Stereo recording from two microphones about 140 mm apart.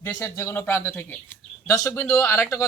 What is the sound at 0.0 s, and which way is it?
Speech, 15° left (ahead or behind).